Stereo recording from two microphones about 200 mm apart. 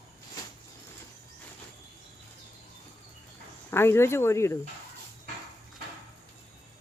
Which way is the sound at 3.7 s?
10° left (ahead or behind).